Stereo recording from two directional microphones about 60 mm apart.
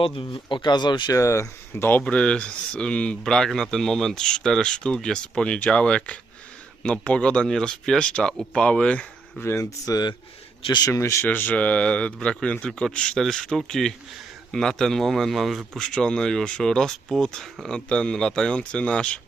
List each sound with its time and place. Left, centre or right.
1.0 s speech: left
2.0 s speech: centre
9.4 s speech: left
9.6 s speech: left
10.8 s speech: left
11.3 s a man's voice: left; by 15.8 s centre
15.8 s speech: centre